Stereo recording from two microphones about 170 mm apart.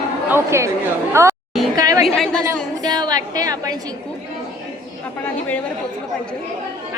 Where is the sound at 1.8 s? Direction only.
20° right (ahead or behind).